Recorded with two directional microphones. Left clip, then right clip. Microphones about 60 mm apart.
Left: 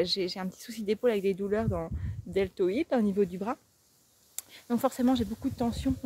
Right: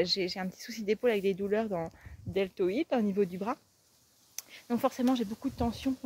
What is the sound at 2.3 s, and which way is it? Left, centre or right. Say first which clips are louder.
Speech: left 2 dB; left.